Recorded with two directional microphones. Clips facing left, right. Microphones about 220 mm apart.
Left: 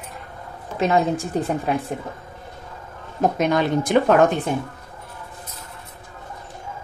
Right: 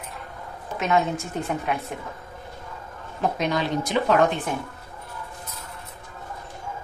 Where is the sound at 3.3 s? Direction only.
50° left (ahead or behind).